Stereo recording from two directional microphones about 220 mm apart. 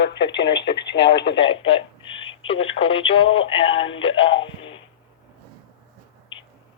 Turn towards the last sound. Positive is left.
turn(degrees=25)  # may be behind; listen again after turning